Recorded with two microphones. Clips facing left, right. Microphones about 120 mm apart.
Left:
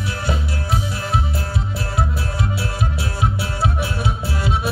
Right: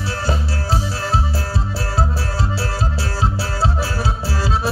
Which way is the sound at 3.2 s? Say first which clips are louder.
Right 1 dB; 30° right (ahead or behind).